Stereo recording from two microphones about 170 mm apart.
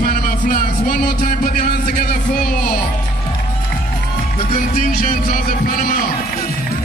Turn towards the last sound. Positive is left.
turn(degrees=55)  # may be behind; listen again after turning